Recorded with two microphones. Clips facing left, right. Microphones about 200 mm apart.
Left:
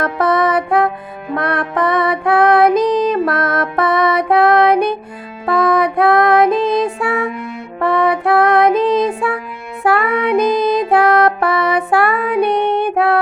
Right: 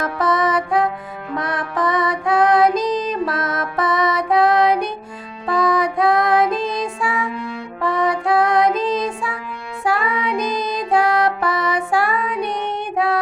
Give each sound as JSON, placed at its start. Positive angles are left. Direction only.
{"t": 0.0, "sound": "music", "side_deg": 60}